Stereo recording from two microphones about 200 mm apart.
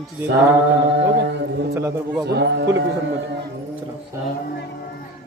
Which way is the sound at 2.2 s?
55° right (ahead or behind).